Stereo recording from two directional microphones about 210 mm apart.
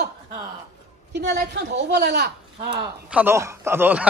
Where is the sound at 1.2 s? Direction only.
55° right (ahead or behind).